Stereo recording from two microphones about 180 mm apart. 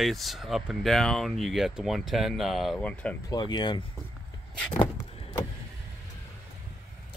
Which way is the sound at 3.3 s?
25° left (ahead or behind).